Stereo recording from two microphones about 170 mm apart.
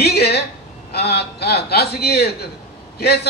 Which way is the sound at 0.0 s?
70° left (ahead or behind).